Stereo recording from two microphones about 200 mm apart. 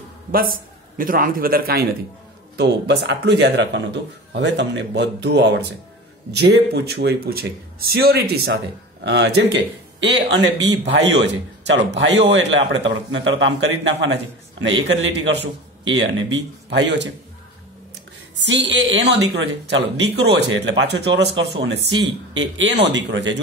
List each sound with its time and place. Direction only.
0.3 s speech: 45° right (ahead or behind)
18.4 s speech: 60° right (ahead or behind)